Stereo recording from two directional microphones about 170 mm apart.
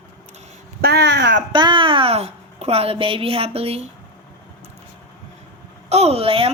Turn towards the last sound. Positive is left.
turn(degrees=-35)  # may be behind; listen again after turning